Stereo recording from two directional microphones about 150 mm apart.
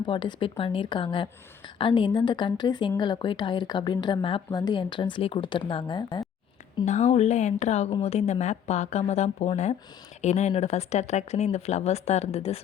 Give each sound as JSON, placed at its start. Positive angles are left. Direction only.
{"t": 0.0, "sound": "a woman's voice", "side_deg": 30}
{"t": 6.8, "sound": "speech", "side_deg": 50}